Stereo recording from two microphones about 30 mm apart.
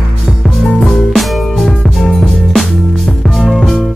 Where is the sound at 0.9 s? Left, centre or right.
Centre.